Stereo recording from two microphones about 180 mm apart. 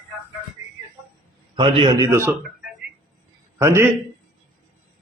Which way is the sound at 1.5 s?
30° right (ahead or behind).